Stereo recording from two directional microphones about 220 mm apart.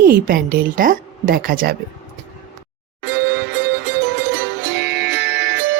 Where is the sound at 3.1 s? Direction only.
50° right (ahead or behind).